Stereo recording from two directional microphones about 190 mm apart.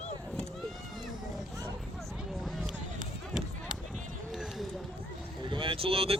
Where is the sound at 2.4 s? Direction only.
Centre (ahead or behind).